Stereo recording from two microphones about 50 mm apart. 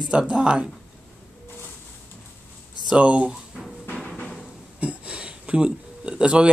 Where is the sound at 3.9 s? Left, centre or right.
Centre.